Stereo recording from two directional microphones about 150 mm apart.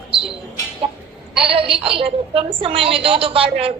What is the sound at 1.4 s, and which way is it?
A woman's voice, 40° right (ahead or behind).